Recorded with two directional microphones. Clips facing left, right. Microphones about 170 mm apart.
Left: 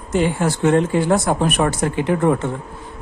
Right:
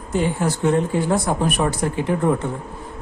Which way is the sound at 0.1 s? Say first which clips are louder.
Left 2 dB; 85° left.